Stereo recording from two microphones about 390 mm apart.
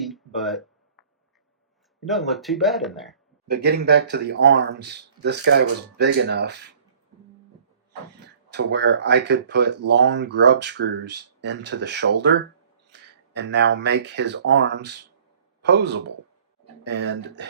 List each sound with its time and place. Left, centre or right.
0.0 s a sound: centre
2.0 s speech: centre
3.4 s speech: right
8.2 s speech: right